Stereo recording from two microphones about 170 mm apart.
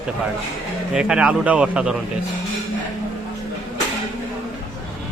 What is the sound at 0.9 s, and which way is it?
A man's voice, 5° right (ahead or behind).